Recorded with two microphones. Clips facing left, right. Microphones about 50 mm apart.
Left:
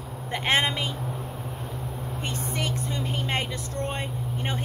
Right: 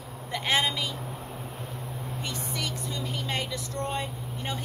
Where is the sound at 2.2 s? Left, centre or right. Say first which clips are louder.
Left 4 dB; left.